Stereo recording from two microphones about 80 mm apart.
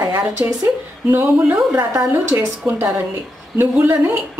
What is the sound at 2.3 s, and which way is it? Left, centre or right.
A woman's voice, right.